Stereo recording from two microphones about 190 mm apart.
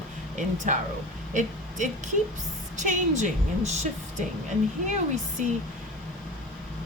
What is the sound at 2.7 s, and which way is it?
A woman's voice, 40° right (ahead or behind).